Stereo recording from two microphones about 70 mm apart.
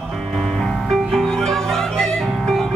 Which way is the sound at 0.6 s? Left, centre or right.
Centre.